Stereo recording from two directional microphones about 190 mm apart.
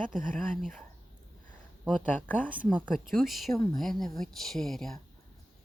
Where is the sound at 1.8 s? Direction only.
10° left (ahead or behind).